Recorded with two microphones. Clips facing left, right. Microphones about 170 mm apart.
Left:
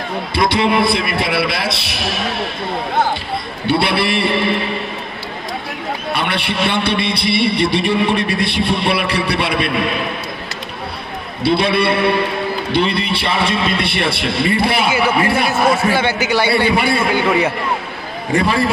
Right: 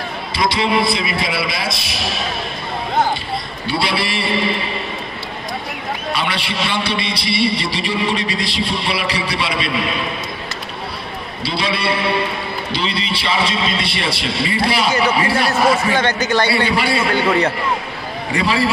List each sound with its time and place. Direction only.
0.3 s a man's voice: 60° left (ahead or behind)
3.6 s a man's voice: 60° left (ahead or behind)
6.1 s a man's voice: 55° left (ahead or behind)
11.4 s a man's voice: 55° left (ahead or behind)
15.9 s a man's voice: 10° left (ahead or behind)
16.4 s a man's voice: 55° left (ahead or behind)
17.1 s a man's voice: 10° left (ahead or behind)
18.3 s a man's voice: 50° left (ahead or behind)